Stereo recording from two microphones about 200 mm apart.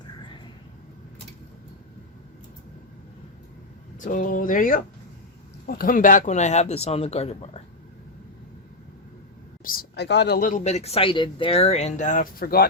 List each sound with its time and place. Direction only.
4.0 s speech: 40° left (ahead or behind)
9.6 s speech: 50° left (ahead or behind)